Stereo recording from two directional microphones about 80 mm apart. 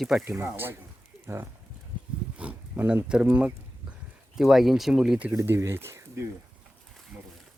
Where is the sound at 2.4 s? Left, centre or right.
Centre.